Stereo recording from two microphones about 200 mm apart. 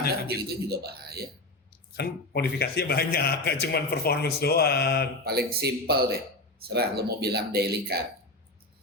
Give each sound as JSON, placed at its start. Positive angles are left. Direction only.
{"t": 0.3, "sound": "speech", "side_deg": -50}
{"t": 2.0, "sound": "a man's voice", "side_deg": 50}
{"t": 5.2, "sound": "speech", "side_deg": -50}